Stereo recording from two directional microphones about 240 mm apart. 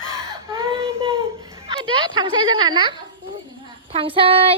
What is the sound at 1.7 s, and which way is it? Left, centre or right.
Speech, centre.